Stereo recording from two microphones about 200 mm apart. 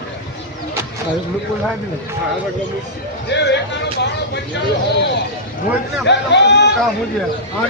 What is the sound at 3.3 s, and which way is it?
Speech, 60° left (ahead or behind).